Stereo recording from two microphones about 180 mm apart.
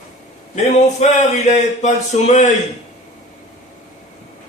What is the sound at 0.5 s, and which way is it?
Speech, 40° left (ahead or behind).